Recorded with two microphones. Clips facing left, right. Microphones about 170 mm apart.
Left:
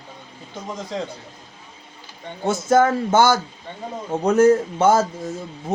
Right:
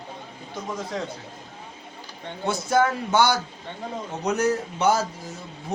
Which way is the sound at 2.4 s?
50° left (ahead or behind).